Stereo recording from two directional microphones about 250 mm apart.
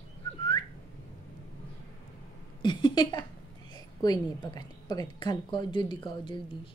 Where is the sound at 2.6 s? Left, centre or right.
Centre.